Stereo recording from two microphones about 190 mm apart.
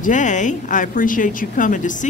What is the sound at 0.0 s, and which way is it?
A woman's voice, 40° left (ahead or behind).